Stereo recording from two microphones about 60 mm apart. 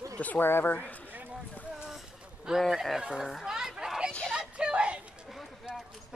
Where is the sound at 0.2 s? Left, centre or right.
Left.